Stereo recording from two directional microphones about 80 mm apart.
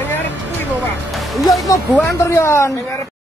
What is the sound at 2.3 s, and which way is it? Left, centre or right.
Speech, left.